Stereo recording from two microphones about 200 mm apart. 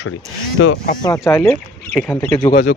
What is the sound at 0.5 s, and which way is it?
Speech, 80° left.